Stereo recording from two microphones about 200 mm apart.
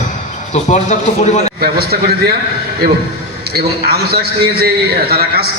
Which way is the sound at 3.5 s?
50° right (ahead or behind).